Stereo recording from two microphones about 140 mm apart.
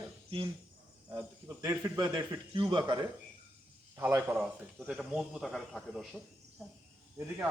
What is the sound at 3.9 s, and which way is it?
A man's voice, 15° right (ahead or behind).